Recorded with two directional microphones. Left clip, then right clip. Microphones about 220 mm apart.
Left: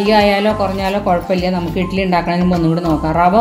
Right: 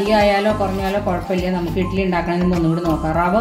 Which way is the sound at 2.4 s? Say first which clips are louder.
Left 3 dB; centre (ahead or behind).